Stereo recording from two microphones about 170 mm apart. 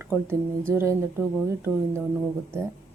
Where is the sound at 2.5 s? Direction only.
15° right (ahead or behind).